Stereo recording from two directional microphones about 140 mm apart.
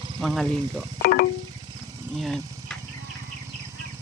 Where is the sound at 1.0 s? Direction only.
90° left.